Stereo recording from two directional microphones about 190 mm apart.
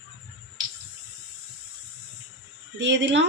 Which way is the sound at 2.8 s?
70° right (ahead or behind).